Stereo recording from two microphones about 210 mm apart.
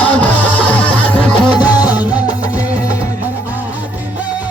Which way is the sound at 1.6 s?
5° right (ahead or behind).